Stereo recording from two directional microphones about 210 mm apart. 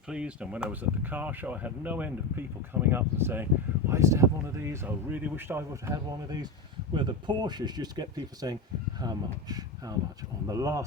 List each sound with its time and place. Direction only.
0.1 s speech: 5° right (ahead or behind)